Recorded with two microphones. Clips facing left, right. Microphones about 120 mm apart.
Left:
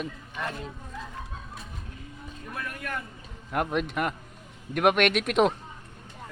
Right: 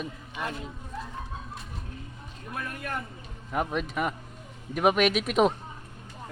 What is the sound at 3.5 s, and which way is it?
Speech, centre (ahead or behind).